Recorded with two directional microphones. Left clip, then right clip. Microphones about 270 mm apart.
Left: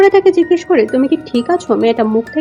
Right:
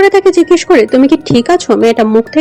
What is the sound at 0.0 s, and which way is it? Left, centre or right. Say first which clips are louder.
Speech: right 2 dB; right.